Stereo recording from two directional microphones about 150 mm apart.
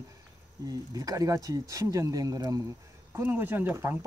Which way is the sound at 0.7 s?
25° right (ahead or behind).